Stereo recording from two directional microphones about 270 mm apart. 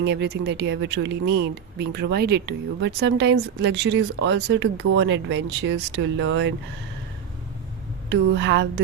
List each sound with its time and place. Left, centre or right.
0.0 s speech: right
8.1 s speech: right